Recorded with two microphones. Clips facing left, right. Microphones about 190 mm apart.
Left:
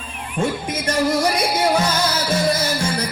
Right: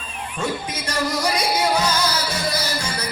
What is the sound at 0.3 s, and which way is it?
Speech, 50° left (ahead or behind).